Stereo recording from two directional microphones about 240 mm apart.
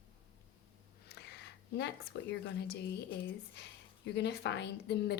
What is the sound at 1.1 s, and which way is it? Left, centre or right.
A woman's voice, left.